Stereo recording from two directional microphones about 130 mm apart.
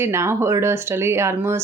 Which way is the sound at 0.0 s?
20° right (ahead or behind).